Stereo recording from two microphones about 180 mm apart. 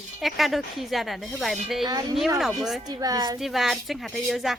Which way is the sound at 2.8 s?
20° right (ahead or behind).